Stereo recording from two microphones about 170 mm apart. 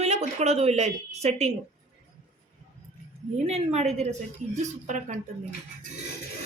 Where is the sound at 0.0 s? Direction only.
40° right (ahead or behind).